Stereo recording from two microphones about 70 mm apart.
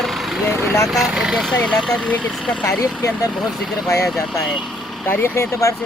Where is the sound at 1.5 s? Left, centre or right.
Centre.